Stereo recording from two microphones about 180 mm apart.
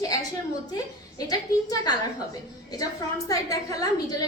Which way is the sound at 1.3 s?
20° left (ahead or behind).